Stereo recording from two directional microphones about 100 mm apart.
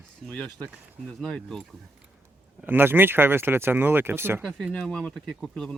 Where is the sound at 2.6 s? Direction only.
20° right (ahead or behind).